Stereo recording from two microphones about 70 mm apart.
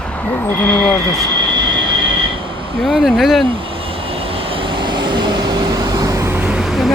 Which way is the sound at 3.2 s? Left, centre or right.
Centre.